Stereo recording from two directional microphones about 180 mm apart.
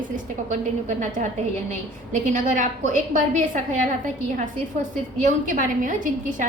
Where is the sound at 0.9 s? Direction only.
45° right (ahead or behind).